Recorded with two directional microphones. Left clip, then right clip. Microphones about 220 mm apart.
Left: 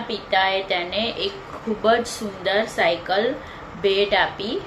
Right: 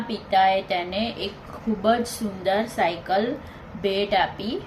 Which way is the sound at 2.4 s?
15° right (ahead or behind).